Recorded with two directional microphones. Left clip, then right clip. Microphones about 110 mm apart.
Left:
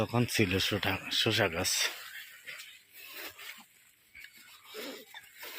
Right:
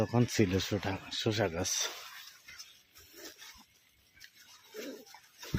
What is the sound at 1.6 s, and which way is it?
Speech, 30° right (ahead or behind).